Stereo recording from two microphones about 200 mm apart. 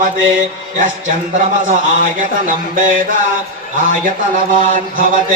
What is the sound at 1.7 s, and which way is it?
A man's voice, 40° right (ahead or behind).